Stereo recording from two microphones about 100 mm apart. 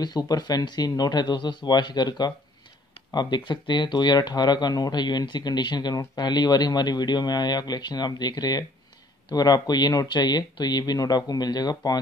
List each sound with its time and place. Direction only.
0.0 s speech: 45° left (ahead or behind)